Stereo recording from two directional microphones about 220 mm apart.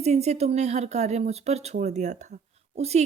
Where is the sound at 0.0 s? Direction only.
30° right (ahead or behind).